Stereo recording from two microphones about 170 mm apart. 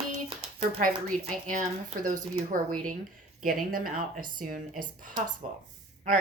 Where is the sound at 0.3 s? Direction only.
35° right (ahead or behind).